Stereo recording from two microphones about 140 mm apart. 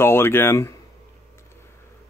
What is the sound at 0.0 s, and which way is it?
Speech, 15° left (ahead or behind).